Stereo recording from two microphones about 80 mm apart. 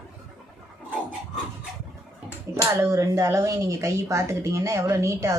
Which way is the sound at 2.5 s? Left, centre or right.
Right.